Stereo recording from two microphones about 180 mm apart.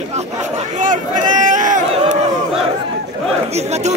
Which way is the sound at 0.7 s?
45° right (ahead or behind).